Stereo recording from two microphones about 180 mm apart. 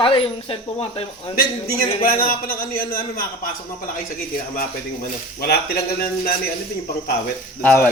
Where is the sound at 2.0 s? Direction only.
55° left (ahead or behind).